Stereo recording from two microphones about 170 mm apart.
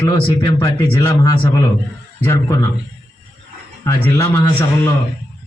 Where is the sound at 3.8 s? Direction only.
15° left (ahead or behind).